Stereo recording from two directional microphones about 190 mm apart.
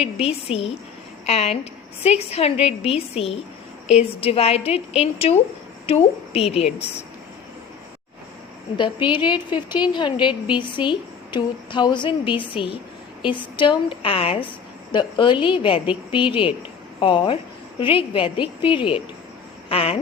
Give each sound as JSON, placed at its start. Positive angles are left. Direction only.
{"t": 0.0, "sound": "a woman's voice", "side_deg": 30}
{"t": 9.0, "sound": "a woman's voice", "side_deg": 25}